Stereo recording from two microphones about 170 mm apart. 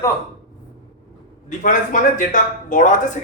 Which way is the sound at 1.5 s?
50° left (ahead or behind).